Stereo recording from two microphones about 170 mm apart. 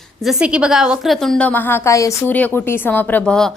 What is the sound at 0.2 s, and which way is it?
A woman's voice, 5° right (ahead or behind).